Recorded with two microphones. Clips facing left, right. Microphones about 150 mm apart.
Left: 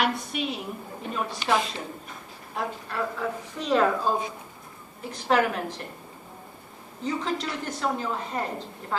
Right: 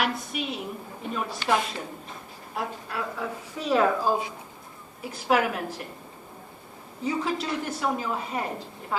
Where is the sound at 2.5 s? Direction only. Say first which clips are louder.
Left 1 dB; 5° right (ahead or behind).